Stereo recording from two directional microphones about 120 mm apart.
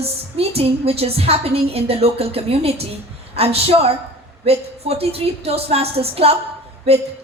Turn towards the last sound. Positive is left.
turn(degrees=-60)  # may be behind; listen again after turning